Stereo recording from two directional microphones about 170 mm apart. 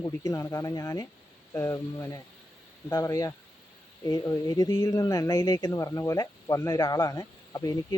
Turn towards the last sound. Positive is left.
turn(degrees=20)  # may be behind; listen again after turning